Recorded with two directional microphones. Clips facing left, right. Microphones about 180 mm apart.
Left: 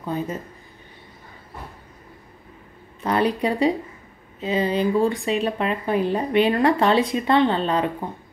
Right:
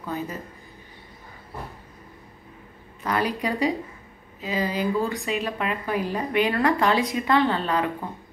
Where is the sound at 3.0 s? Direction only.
30° left (ahead or behind).